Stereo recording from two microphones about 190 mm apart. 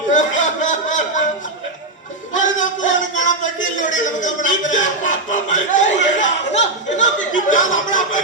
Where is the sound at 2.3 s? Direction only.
40° left (ahead or behind).